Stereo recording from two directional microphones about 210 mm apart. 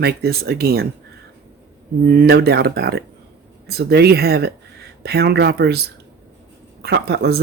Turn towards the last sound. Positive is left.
turn(degrees=-50)  # may be behind; listen again after turning